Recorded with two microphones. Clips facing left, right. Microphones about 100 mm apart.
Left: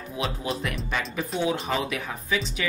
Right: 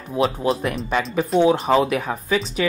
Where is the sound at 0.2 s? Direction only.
40° right (ahead or behind).